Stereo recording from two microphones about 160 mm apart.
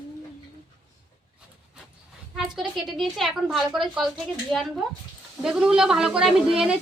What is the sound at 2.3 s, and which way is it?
A woman's voice, 5° right (ahead or behind).